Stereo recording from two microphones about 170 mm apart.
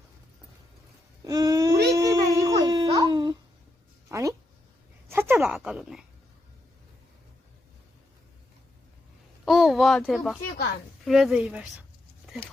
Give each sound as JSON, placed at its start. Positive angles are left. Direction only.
{"t": 1.2, "sound": "wail", "side_deg": -20}
{"t": 1.7, "sound": "dog", "side_deg": -75}
{"t": 2.0, "sound": "baby cry", "side_deg": -20}
{"t": 4.1, "sound": "a sound", "side_deg": -20}
{"t": 5.0, "sound": "speech", "side_deg": -15}
{"t": 9.4, "sound": "a sound", "side_deg": 0}
{"t": 11.0, "sound": "speech", "side_deg": 0}